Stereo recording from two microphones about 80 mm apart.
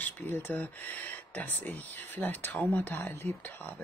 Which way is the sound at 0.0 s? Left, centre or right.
Left.